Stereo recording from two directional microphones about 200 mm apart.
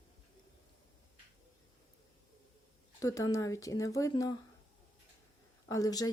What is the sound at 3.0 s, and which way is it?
Speech, 15° left (ahead or behind).